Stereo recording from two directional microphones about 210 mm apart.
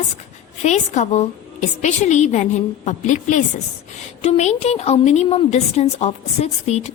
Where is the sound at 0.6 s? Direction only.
35° left (ahead or behind).